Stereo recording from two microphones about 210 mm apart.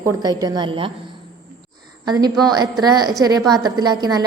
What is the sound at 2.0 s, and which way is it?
A woman's voice, 20° right (ahead or behind).